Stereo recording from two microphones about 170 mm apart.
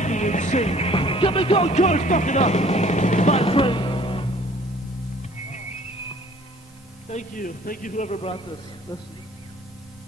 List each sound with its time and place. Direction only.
0.0 s music: 45° left (ahead or behind)
7.1 s a man's voice: 50° left (ahead or behind)